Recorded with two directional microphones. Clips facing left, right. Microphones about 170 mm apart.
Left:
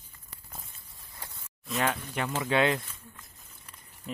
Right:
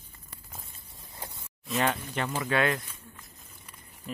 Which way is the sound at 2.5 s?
20° left (ahead or behind).